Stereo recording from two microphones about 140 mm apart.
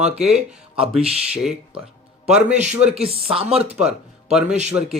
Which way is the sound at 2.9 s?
45° right (ahead or behind).